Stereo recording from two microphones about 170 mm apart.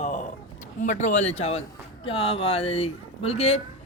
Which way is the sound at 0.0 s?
45° left (ahead or behind).